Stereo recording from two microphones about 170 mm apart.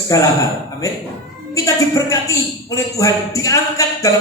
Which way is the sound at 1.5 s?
20° left (ahead or behind).